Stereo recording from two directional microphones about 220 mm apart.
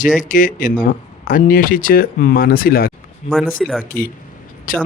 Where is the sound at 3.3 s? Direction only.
Centre (ahead or behind).